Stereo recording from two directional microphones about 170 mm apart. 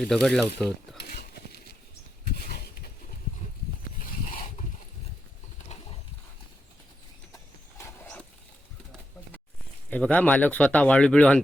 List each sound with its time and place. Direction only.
0.0 s speech: 5° left (ahead or behind)
5.6 s a sound: 40° left (ahead or behind)
8.0 s dog: 5° left (ahead or behind)
9.9 s speech: 10° left (ahead or behind)